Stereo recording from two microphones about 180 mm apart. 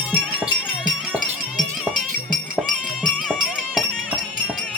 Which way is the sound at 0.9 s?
Centre (ahead or behind).